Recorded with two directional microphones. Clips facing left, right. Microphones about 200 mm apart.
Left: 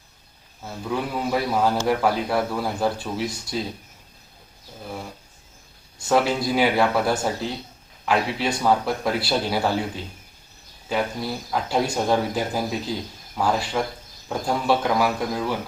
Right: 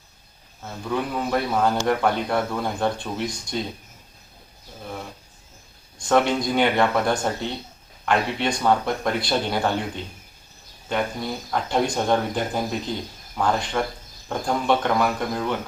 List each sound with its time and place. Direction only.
0.9 s speech: 5° left (ahead or behind)
6.0 s speech: 5° left (ahead or behind)